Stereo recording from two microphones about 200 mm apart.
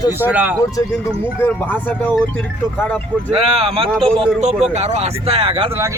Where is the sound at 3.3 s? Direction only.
30° right (ahead or behind).